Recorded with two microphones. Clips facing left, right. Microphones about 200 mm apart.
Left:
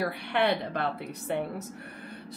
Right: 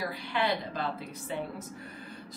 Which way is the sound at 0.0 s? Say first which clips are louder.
Left 4 dB; 60° left (ahead or behind).